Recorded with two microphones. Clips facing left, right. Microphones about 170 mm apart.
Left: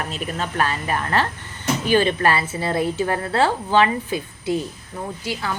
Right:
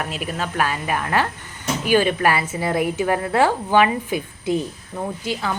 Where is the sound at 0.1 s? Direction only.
5° right (ahead or behind).